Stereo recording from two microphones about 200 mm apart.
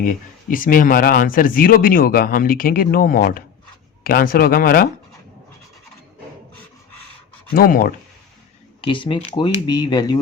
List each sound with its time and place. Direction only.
0.5 s speech: 45° left (ahead or behind)
7.5 s speech: 45° left (ahead or behind)
8.8 s speech: 25° left (ahead or behind)